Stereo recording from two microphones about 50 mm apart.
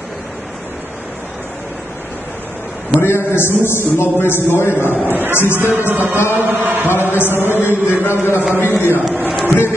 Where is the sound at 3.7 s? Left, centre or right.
Left.